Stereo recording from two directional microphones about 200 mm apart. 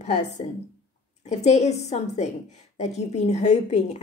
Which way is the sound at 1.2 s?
35° left (ahead or behind).